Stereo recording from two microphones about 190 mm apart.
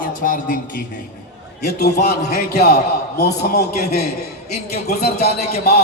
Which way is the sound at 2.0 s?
55° left (ahead or behind).